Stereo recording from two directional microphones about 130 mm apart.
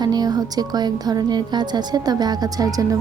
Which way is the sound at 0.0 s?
30° right (ahead or behind).